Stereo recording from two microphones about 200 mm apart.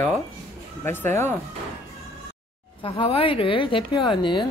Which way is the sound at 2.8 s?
25° left (ahead or behind).